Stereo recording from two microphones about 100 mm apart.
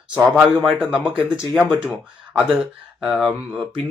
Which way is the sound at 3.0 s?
Centre (ahead or behind).